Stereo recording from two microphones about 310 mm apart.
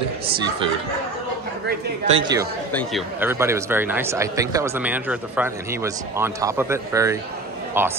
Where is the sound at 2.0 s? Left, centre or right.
Centre.